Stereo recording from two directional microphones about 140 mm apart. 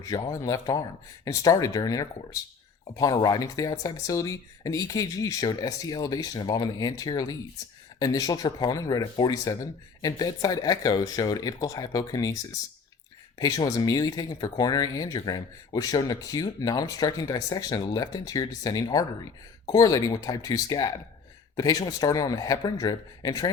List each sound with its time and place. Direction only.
0.0 s speech: 25° left (ahead or behind)
13.4 s speech: 25° left (ahead or behind)